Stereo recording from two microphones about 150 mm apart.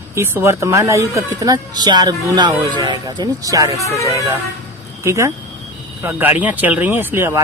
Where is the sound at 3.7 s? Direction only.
20° left (ahead or behind).